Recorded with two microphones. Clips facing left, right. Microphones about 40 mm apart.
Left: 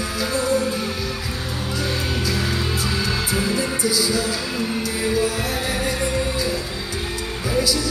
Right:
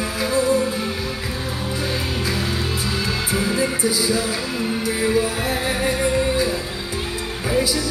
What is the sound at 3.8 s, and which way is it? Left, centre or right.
Music, right.